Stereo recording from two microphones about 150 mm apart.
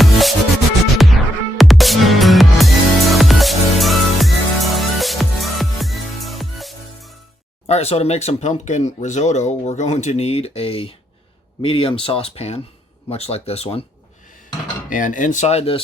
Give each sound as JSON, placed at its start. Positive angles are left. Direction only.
{"t": 0.0, "sound": "music", "side_deg": 0}
{"t": 7.7, "sound": "speech", "side_deg": 45}
{"t": 14.8, "sound": "speech", "side_deg": 60}